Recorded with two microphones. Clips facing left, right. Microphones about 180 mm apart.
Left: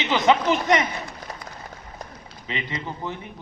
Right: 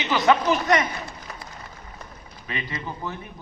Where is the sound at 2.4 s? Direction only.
20° left (ahead or behind).